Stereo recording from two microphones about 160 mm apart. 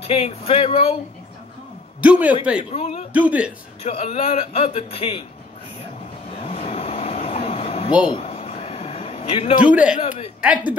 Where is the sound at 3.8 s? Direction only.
40° left (ahead or behind).